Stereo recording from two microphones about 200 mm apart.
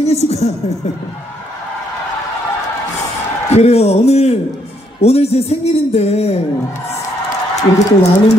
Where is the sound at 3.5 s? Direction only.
30° left (ahead or behind).